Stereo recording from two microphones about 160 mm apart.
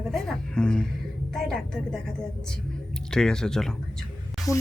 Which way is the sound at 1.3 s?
5° left (ahead or behind).